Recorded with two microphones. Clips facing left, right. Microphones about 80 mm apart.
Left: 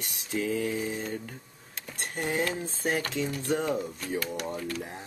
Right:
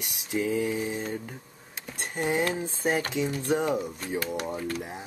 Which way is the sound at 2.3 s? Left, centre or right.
Centre.